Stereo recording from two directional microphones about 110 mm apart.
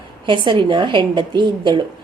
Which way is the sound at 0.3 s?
45° right (ahead or behind).